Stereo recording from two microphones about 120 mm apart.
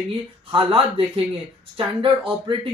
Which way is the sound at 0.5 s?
45° right (ahead or behind).